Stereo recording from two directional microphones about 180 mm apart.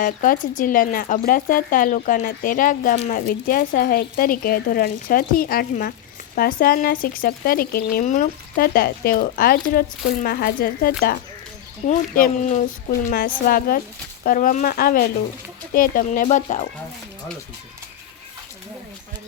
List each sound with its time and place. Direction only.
0.0 s speech: 50° left (ahead or behind)
11.9 s speech: 45° left (ahead or behind)